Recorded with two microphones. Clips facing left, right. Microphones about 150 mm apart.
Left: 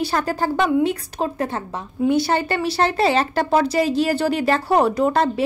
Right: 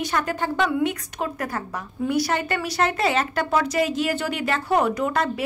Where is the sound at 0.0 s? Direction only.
35° left (ahead or behind).